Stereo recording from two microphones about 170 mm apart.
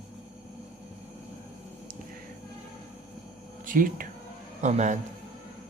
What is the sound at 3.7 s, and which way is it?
Speech, 55° right (ahead or behind).